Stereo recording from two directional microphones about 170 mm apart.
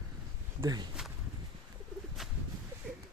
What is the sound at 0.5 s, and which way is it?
Speech, 20° right (ahead or behind).